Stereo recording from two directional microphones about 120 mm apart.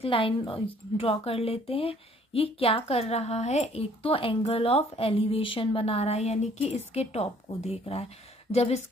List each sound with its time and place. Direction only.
0.0 s speech: 45° left (ahead or behind)